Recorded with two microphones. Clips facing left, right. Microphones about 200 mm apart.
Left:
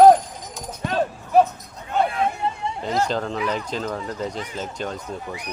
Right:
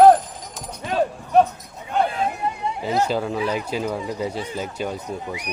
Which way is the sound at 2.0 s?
30° right (ahead or behind).